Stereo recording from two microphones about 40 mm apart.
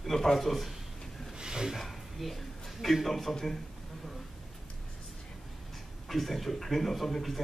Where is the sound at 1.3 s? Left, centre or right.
Centre.